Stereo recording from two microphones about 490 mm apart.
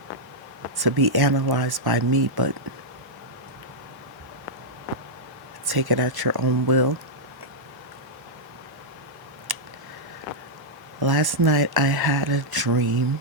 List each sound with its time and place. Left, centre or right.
0.8 s speech: right
5.6 s speech: right
9.5 s a sound: right
11.0 s speech: right